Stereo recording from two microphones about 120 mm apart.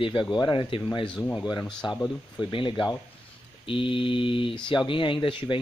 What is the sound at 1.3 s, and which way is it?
Speech, 35° left (ahead or behind).